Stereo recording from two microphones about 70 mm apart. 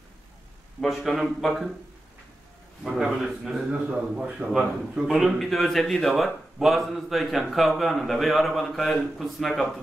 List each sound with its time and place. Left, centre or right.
0.7 s a man's voice: centre
2.8 s a man's voice: centre